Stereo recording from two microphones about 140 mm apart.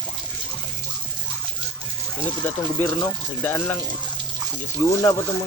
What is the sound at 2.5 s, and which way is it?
Speech, 10° left (ahead or behind).